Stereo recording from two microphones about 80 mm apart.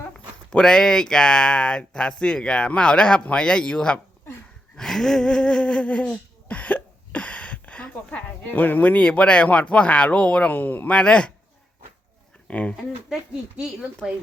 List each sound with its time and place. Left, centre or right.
0.5 s speech: centre
4.8 s a sound: centre
12.5 s speech: centre
14.0 s speech: centre